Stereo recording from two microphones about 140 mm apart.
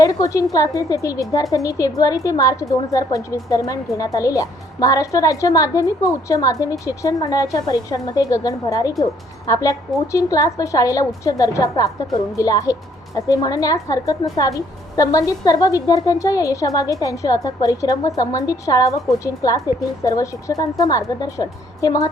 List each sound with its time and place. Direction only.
0.0 s a woman's voice: 25° left (ahead or behind)